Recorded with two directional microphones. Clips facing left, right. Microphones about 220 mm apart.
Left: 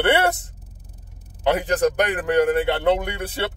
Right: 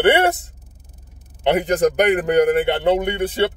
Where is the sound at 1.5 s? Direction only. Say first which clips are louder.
Right 4 dB; 20° right (ahead or behind).